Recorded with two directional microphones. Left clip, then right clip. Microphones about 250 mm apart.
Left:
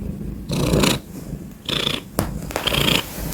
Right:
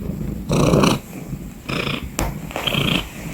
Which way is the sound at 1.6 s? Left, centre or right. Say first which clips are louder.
Left 2 dB; centre.